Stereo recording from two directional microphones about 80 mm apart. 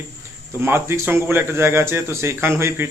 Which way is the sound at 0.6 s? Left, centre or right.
Right.